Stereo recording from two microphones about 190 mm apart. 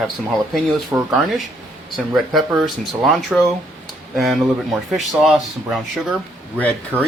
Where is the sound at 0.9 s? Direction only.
10° right (ahead or behind).